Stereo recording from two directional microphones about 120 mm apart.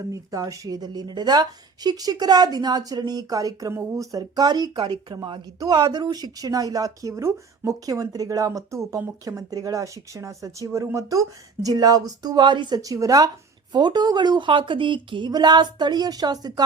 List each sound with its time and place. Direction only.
0.1 s a woman's voice: 30° right (ahead or behind)